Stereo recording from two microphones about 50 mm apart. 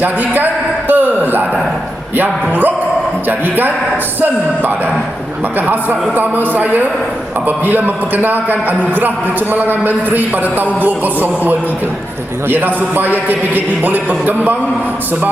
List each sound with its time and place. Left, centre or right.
0.0 s a sound: right
2.1 s a man's voice: right
5.5 s a man's voice: right